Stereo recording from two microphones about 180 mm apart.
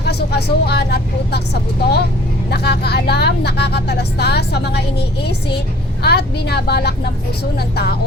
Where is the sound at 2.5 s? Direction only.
65° left (ahead or behind).